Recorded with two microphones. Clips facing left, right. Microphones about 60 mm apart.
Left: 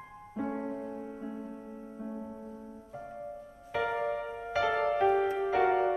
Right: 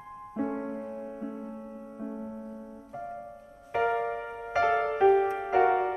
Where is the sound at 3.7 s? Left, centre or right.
Right.